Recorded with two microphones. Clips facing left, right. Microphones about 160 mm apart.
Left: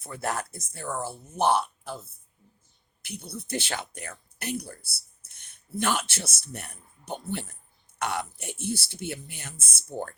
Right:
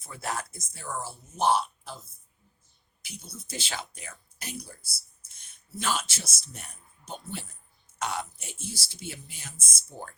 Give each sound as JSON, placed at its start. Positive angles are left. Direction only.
{"t": 0.0, "sound": "speech", "side_deg": 55}
{"t": 3.0, "sound": "speech", "side_deg": 60}